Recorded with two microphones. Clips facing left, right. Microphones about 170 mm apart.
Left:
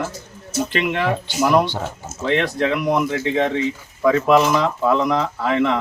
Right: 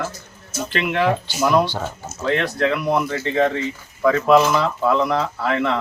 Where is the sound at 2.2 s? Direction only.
20° left (ahead or behind).